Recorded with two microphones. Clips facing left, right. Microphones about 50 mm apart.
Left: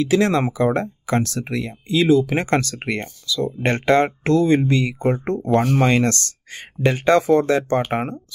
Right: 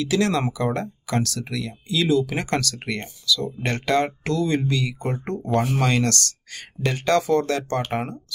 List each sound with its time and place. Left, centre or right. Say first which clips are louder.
0.0 s speech: left 4 dB; left